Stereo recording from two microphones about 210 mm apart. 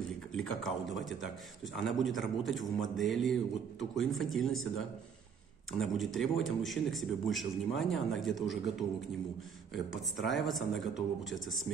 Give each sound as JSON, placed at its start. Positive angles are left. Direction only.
{"t": 0.4, "sound": "speech", "side_deg": 0}
{"t": 5.7, "sound": "speech", "side_deg": 0}
{"t": 10.1, "sound": "speech", "side_deg": 0}